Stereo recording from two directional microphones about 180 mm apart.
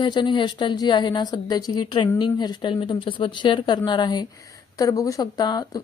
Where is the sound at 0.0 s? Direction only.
25° left (ahead or behind).